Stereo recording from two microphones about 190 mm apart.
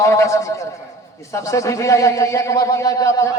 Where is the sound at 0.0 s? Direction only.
15° left (ahead or behind).